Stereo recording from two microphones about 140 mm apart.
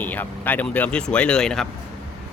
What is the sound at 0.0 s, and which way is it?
Speech, 10° left (ahead or behind).